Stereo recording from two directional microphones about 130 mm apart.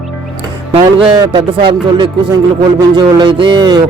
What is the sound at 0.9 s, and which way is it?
Speech, 35° right (ahead or behind).